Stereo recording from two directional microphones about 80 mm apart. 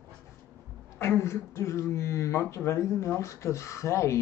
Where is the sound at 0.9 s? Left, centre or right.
Left.